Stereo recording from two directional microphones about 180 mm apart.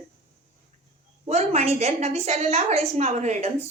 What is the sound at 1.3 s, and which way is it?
A woman's voice, 40° right (ahead or behind).